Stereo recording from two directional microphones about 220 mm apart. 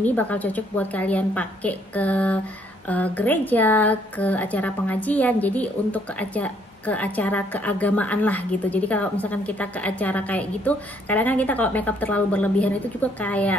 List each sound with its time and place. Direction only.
0.0 s a woman's voice: 5° left (ahead or behind)